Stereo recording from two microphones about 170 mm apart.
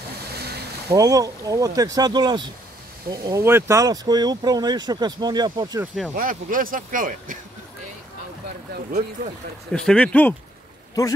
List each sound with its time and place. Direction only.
0.3 s boat: 70° right (ahead or behind)
0.8 s speech: 20° right (ahead or behind)
6.1 s speech: 55° right (ahead or behind)
9.7 s speech: 5° left (ahead or behind)